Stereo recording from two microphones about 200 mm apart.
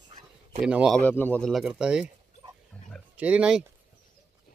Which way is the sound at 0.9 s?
10° left (ahead or behind).